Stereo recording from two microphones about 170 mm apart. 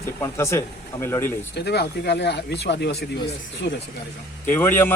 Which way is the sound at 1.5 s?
80° left.